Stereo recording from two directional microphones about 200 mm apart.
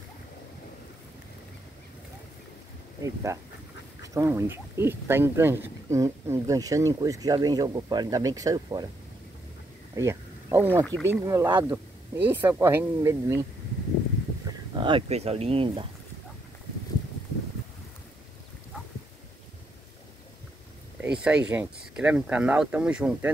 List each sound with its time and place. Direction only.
3.3 s speech: 15° right (ahead or behind)
9.9 s speech: 15° right (ahead or behind)
14.7 s speech: 25° right (ahead or behind)
21.0 s speech: 5° right (ahead or behind)